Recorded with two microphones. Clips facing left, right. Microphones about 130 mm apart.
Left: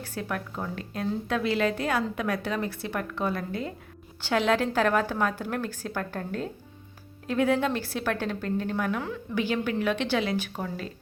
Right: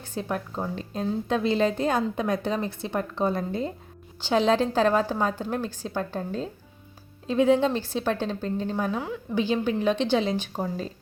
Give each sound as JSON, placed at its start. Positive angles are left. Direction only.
{"t": 0.0, "sound": "speech", "side_deg": -25}
{"t": 9.9, "sound": "speech", "side_deg": -30}
{"t": 10.5, "sound": "speech", "side_deg": -35}